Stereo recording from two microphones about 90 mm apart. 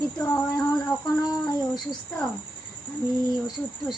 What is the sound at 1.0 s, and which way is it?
Speech, 45° left (ahead or behind).